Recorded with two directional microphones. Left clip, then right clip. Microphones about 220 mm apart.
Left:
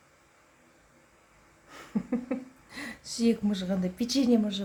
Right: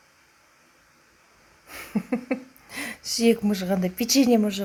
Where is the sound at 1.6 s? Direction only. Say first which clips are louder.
Right 5 dB; 20° right (ahead or behind).